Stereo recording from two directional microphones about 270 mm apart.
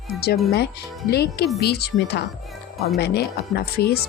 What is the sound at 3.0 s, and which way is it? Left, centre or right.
Speech, left.